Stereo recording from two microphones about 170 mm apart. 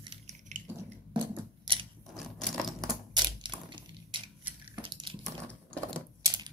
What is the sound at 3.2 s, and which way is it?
Crushing, 25° right (ahead or behind).